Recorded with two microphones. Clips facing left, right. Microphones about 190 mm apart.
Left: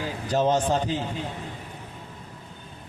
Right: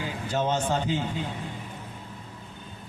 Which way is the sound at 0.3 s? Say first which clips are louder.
Left 4 dB; 35° left (ahead or behind).